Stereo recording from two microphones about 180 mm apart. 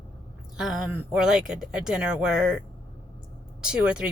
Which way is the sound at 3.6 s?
5° right (ahead or behind).